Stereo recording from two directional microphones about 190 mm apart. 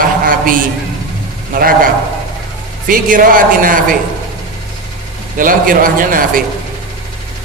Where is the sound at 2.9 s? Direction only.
45° right (ahead or behind).